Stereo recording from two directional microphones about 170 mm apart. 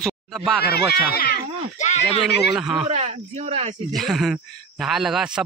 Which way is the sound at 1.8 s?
40° left (ahead or behind).